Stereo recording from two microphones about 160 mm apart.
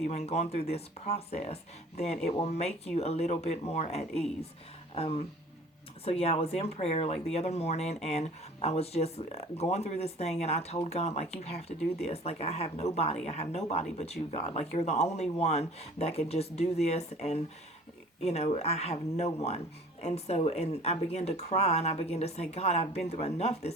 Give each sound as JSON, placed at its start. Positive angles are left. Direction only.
{"t": 0.0, "sound": "speech", "side_deg": 45}